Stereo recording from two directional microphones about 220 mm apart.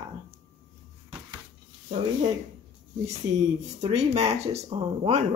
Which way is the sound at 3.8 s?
30° right (ahead or behind).